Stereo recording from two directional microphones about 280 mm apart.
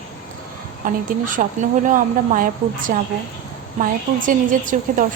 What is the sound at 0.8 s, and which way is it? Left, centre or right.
Speech, right.